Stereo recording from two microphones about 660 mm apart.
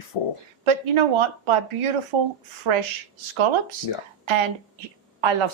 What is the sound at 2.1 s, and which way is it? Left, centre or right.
Speech, right.